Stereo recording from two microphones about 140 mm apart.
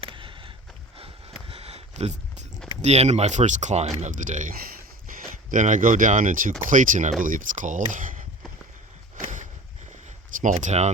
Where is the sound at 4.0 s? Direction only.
65° right (ahead or behind).